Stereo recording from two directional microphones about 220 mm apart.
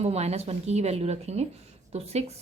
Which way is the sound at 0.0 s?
30° right (ahead or behind).